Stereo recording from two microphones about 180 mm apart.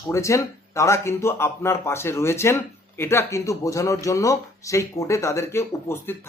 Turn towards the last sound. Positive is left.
turn(degrees=15)  # may be behind; listen again after turning